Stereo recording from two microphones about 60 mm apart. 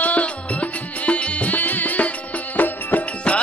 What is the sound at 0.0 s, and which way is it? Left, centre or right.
Music, left.